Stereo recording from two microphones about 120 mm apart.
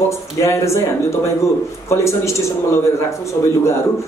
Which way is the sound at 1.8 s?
25° left (ahead or behind).